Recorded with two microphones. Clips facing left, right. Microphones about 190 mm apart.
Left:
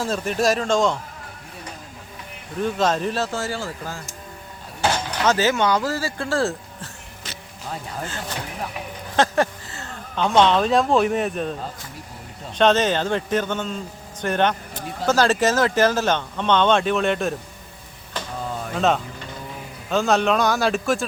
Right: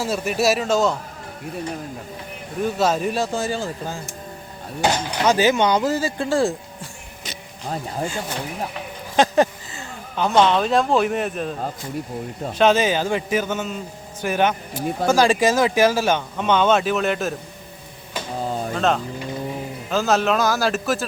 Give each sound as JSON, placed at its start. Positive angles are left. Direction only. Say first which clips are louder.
{"t": 0.0, "sound": "a man's voice", "louder": "right 1 dB", "side_deg": -10}
{"t": 2.6, "sound": "a man's voice", "louder": "right 1 dB", "side_deg": -10}
{"t": 9.1, "sound": "speech", "louder": "right 3 dB", "side_deg": -15}
{"t": 12.5, "sound": "a man's voice", "louder": "right 1 dB", "side_deg": -10}
{"t": 18.3, "sound": "a sound", "louder": "right 5 dB", "side_deg": -30}
{"t": 18.7, "sound": "speech", "louder": "left 2 dB", "side_deg": 0}